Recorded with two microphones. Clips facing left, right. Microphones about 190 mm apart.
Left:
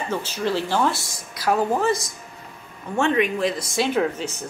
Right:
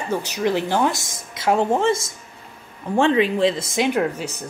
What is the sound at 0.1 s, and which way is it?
A woman's voice, 15° right (ahead or behind).